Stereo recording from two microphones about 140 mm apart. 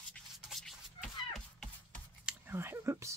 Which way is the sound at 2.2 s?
15° right (ahead or behind).